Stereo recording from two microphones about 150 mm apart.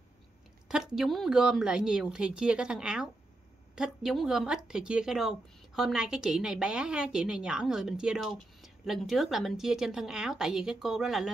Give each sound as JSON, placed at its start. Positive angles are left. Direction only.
{"t": 0.7, "sound": "a woman's voice", "side_deg": -5}